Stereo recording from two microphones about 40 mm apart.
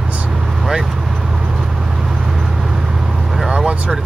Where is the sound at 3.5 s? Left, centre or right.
Centre.